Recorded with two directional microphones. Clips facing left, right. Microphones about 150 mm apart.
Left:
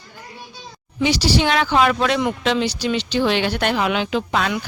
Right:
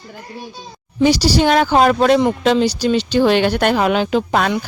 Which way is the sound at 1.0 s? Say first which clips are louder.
Right 5 dB; 40° right (ahead or behind).